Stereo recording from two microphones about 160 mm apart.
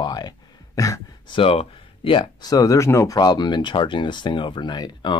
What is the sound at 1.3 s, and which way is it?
Speech, 35° left (ahead or behind).